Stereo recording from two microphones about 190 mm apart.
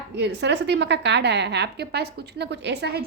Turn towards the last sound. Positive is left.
turn(degrees=-60)  # may be behind; listen again after turning